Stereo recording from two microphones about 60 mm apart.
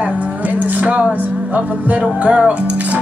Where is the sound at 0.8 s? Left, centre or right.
Right.